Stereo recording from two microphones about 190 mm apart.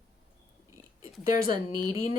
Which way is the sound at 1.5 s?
20° right (ahead or behind).